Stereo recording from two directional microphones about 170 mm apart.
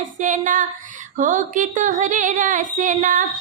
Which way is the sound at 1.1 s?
50° right (ahead or behind).